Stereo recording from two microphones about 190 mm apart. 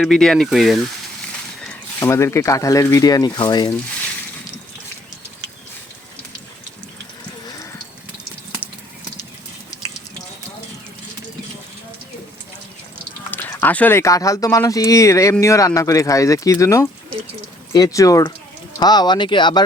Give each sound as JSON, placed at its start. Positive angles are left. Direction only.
{"t": 0.0, "sound": "speech", "side_deg": 5}
{"t": 1.6, "sound": "speech", "side_deg": 10}
{"t": 13.3, "sound": "speech", "side_deg": 10}